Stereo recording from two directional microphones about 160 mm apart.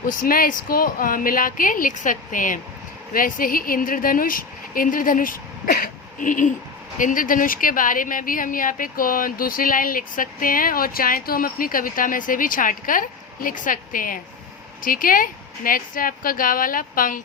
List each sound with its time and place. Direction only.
0.0 s a woman's voice: 60° left (ahead or behind)